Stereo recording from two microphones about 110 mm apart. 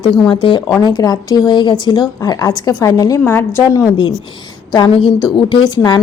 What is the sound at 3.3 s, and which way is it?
Speech, 20° left (ahead or behind).